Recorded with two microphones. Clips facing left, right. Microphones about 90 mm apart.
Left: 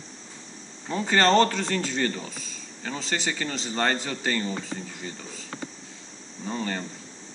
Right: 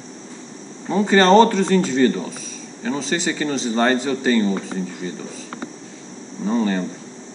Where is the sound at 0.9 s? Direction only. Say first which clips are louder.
Right 7 dB; 15° right (ahead or behind).